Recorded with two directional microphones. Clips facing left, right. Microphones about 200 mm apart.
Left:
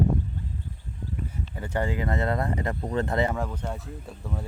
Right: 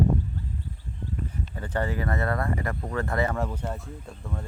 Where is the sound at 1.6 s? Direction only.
15° left (ahead or behind).